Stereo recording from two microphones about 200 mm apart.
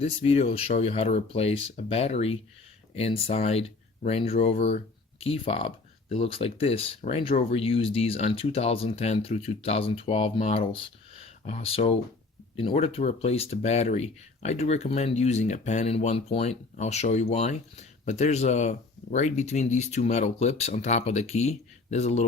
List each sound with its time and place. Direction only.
0.0 s speech: 30° left (ahead or behind)